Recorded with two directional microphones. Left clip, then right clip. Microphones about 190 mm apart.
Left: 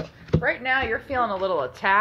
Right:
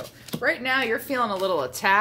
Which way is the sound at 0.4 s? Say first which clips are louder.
Right 1 dB; 25° right (ahead or behind).